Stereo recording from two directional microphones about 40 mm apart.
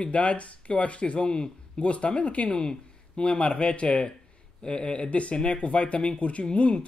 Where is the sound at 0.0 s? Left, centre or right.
Left.